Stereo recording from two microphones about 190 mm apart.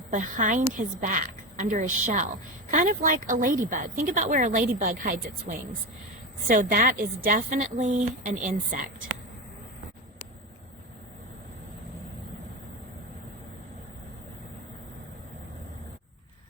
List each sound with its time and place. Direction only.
0.1 s a woman's voice: 40° right (ahead or behind)